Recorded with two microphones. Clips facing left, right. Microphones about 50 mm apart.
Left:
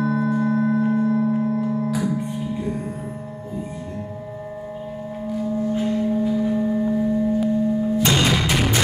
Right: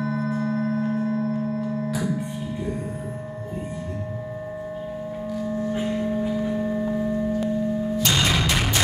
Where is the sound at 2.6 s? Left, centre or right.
Left.